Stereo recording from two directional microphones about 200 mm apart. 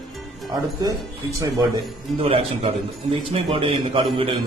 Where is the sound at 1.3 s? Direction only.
15° right (ahead or behind).